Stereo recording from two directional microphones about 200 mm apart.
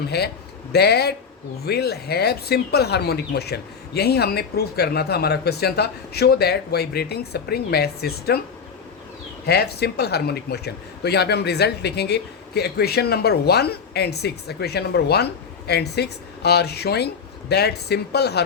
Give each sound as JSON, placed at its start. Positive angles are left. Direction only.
{"t": 0.1, "sound": "speech", "side_deg": 55}
{"t": 9.5, "sound": "speech", "side_deg": 55}